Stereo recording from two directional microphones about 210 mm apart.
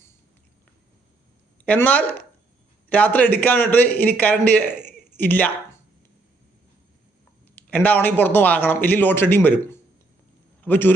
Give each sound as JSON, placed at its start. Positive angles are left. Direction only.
{"t": 1.6, "sound": "speech", "side_deg": 10}
{"t": 7.5, "sound": "a man's voice", "side_deg": 10}